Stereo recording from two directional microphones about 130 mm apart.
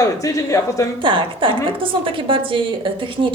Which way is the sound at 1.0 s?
40° right (ahead or behind).